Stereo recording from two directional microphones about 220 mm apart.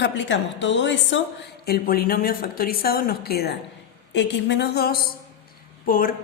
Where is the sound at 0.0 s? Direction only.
55° left (ahead or behind).